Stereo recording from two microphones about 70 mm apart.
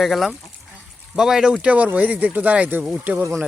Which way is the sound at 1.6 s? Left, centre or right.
Centre.